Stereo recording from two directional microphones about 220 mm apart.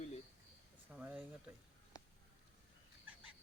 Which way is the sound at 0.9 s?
5° right (ahead or behind).